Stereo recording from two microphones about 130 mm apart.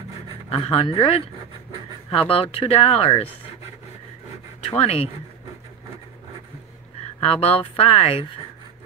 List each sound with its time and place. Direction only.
0.5 s speech: 45° left (ahead or behind)
4.6 s speech: 50° left (ahead or behind)
7.2 s speech: 55° left (ahead or behind)